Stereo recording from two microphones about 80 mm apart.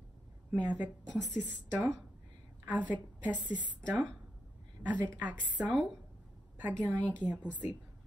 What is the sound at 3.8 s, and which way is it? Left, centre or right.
Speech, centre.